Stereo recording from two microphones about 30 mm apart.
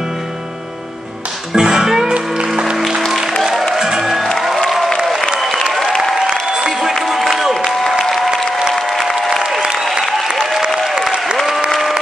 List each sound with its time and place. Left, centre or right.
1.6 s music: centre
2.1 s music: right
3.7 s music: centre
5.9 s applause: centre
7.1 s music: centre
8.7 s applause: centre
11.0 s applause: right